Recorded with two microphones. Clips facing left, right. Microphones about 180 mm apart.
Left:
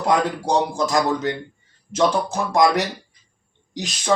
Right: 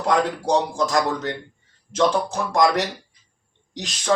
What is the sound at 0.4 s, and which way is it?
Speech, 5° left (ahead or behind).